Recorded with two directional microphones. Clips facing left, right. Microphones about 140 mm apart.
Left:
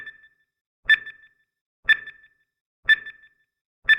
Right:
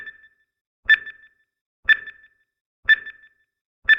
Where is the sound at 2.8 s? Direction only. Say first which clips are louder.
Right 2 dB; 40° left (ahead or behind).